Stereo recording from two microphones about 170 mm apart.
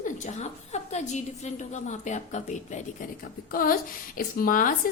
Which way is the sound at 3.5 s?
55° left (ahead or behind).